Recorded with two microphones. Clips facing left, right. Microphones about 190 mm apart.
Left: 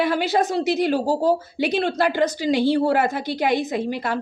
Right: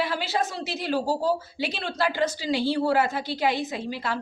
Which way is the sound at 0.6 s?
15° left (ahead or behind).